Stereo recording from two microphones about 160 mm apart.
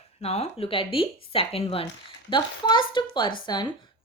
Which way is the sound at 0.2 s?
40° left (ahead or behind).